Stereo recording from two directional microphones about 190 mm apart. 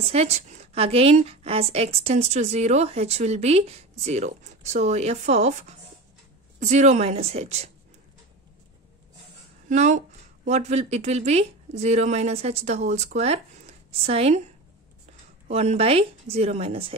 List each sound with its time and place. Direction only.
0.0 s a woman's voice: 35° right (ahead or behind)
9.7 s a woman's voice: 40° right (ahead or behind)
15.4 s a woman's voice: 35° right (ahead or behind)